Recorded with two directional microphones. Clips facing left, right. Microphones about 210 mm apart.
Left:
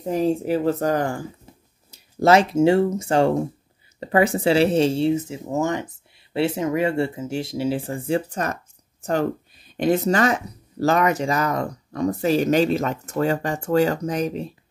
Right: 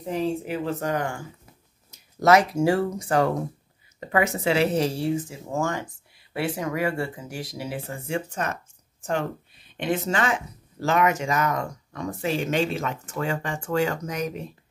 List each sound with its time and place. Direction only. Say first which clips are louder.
0.0 s speech: left 5 dB; 40° left (ahead or behind)